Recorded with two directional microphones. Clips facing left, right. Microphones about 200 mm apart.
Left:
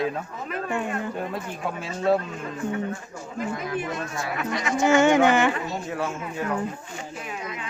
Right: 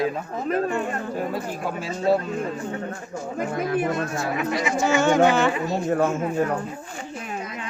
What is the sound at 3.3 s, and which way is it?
Speech, 50° right (ahead or behind).